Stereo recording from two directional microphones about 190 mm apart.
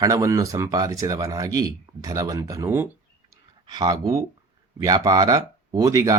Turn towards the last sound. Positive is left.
turn(degrees=-20)  # may be behind; listen again after turning